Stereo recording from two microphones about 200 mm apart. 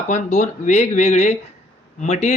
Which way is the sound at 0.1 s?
35° left (ahead or behind).